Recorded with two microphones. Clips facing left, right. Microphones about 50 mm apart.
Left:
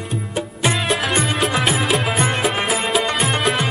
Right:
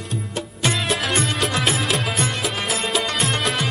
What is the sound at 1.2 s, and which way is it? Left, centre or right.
Music, centre.